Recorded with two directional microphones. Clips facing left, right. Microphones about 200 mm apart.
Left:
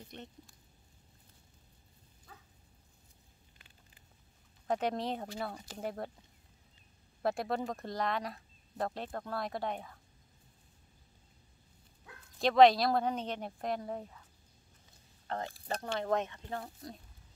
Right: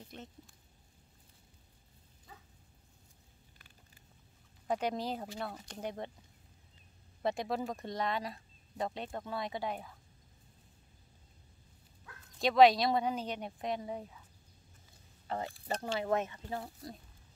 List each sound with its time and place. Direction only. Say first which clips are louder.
3.5 s a sound: right 1 dB; 20° left (ahead or behind)
4.6 s speech: left 1 dB; centre (ahead or behind)
7.2 s speech: left 1 dB; centre (ahead or behind)
12.4 s speech: left 1 dB; centre (ahead or behind)
15.2 s speech: right 1 dB; 5° right (ahead or behind)